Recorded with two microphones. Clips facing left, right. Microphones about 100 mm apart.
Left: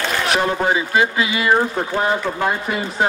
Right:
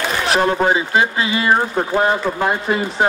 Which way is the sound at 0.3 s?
30° right (ahead or behind).